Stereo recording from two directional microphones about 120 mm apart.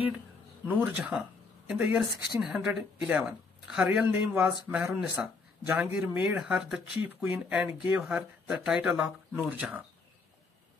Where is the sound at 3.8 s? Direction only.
15° right (ahead or behind).